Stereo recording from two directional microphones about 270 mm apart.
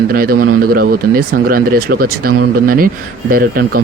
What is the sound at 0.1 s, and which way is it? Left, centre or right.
A man's voice, right.